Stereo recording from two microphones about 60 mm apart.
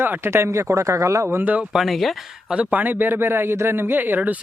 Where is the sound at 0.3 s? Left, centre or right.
Right.